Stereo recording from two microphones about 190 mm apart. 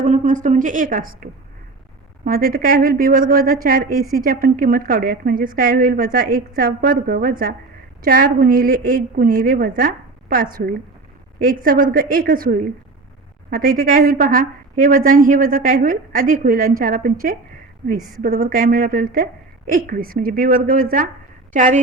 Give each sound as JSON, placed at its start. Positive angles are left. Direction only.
{"t": 0.0, "sound": "a woman's voice", "side_deg": -40}